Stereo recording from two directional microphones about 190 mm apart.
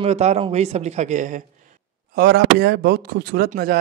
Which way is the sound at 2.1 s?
60° right (ahead or behind).